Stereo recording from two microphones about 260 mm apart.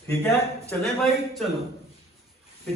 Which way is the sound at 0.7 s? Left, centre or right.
Centre.